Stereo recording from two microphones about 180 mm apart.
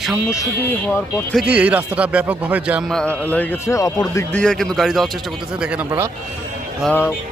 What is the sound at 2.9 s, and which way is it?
Speech, 5° left (ahead or behind).